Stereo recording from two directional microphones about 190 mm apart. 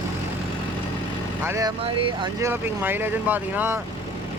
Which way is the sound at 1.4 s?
15° right (ahead or behind).